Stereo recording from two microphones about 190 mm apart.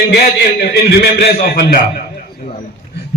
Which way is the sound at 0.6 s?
60° left (ahead or behind).